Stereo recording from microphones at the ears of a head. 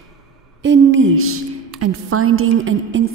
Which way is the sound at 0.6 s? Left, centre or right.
Right.